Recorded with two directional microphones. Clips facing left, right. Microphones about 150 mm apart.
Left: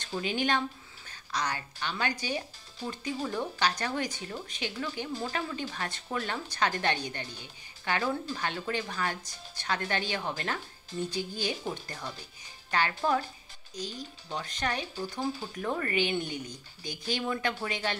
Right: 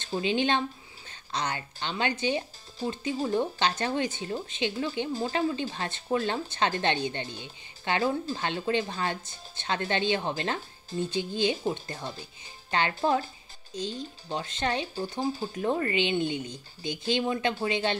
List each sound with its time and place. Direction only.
0.0 s speech: 25° right (ahead or behind)